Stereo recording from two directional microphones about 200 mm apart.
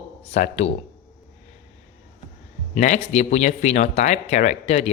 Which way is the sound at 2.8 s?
35° left (ahead or behind).